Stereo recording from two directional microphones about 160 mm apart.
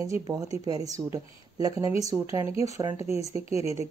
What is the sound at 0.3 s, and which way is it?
Speech, 20° right (ahead or behind).